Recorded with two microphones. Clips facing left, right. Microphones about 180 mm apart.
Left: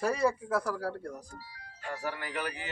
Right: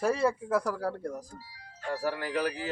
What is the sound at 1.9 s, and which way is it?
Speech, 35° right (ahead or behind).